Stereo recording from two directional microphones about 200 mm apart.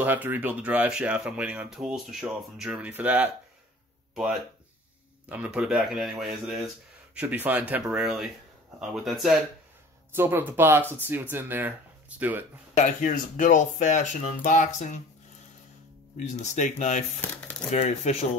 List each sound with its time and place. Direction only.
0.0 s speech: 10° right (ahead or behind)
10.1 s speech: 10° right (ahead or behind)
12.7 s speech: 40° left (ahead or behind)
16.2 s speech: 35° left (ahead or behind)